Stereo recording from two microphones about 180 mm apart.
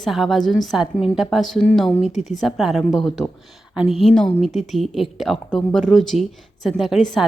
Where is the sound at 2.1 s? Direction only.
40° left (ahead or behind).